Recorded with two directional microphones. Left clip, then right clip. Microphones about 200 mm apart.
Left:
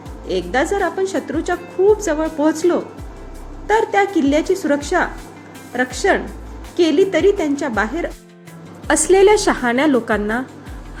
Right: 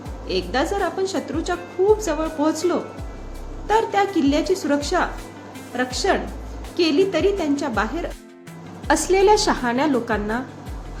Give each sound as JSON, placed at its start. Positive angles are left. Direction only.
{"t": 0.3, "sound": "a woman's voice", "side_deg": 15}